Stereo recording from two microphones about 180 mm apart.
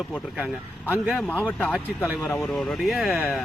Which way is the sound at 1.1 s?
5° left (ahead or behind).